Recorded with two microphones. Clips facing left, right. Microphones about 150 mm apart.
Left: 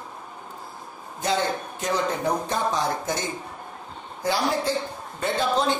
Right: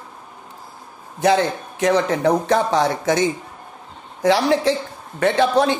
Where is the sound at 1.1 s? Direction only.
90° right.